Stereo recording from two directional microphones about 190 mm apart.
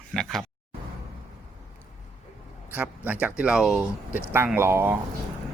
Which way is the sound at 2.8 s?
10° right (ahead or behind).